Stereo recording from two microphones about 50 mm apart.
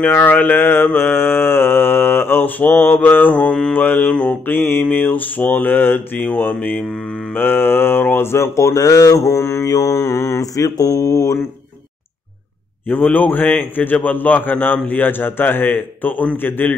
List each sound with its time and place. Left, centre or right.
0.0 s a man's voice: left
0.9 s mantra: left
2.7 s a man's voice: left
4.3 s mantra: left
4.9 s a man's voice: left
6.2 s speech: left
7.3 s mantra: left
8.2 s mantra: left
10.9 s speech: left
12.8 s a man's voice: left